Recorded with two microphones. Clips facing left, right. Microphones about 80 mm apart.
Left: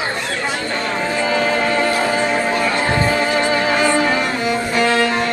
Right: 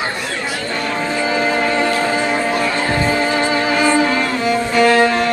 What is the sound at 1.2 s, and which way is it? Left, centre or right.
Music, centre.